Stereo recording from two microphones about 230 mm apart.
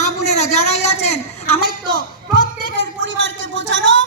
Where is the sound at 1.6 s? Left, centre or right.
Right.